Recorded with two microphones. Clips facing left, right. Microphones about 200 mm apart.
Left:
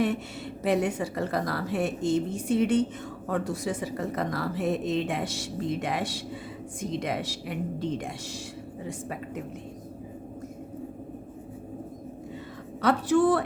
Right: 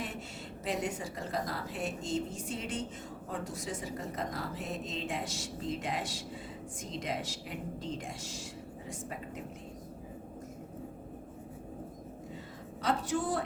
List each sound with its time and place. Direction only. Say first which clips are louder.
0.6 s a woman's voice: left 9 dB; 65° left (ahead or behind)
12.8 s a woman's voice: left 10 dB; 70° left (ahead or behind)